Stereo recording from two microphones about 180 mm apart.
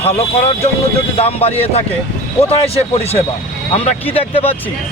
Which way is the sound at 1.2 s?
35° left (ahead or behind).